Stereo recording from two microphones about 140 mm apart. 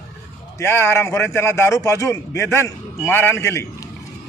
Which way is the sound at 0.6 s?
15° left (ahead or behind).